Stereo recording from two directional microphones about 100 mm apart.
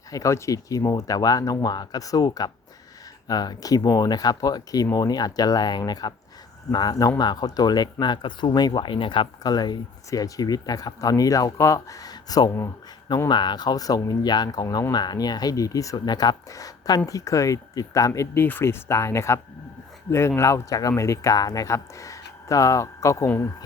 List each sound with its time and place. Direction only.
0.1 s speech: 30° left (ahead or behind); by 9.3 s 55° left (ahead or behind)
9.4 s speech: 40° left (ahead or behind); by 23.5 s 25° left (ahead or behind)